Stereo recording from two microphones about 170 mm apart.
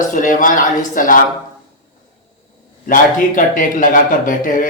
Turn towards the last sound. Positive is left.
turn(degrees=50)  # may be behind; listen again after turning